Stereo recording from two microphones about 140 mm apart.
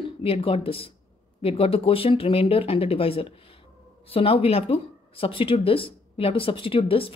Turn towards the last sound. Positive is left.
turn(degrees=40)  # may be behind; listen again after turning